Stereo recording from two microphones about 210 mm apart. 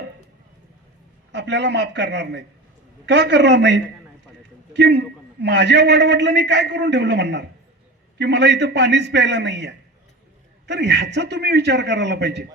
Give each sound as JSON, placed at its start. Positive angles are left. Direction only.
{"t": 1.3, "sound": "a man's voice", "side_deg": -55}